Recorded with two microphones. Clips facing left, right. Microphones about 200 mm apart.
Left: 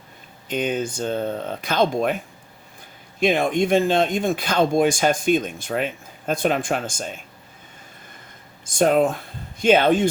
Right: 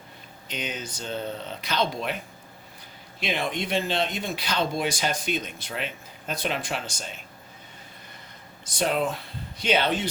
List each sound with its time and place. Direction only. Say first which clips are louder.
0.4 s speech: left 10 dB; 50° left (ahead or behind)
3.2 s speech: left 10 dB; 50° left (ahead or behind)
8.6 s speech: left 8 dB; 50° left (ahead or behind)